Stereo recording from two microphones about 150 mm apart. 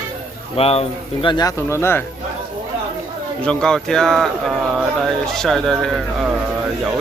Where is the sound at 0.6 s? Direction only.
40° left (ahead or behind); by 2.0 s 15° left (ahead or behind).